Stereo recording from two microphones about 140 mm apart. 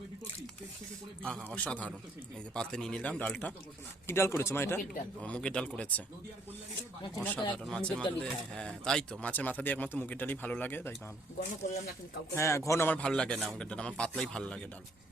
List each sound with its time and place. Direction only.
1.2 s speech: 5° left (ahead or behind)
7.2 s speech: 5° left (ahead or behind)
12.3 s speech: 20° left (ahead or behind)